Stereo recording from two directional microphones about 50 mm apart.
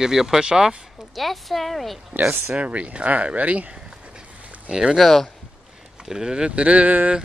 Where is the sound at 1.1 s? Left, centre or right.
Centre.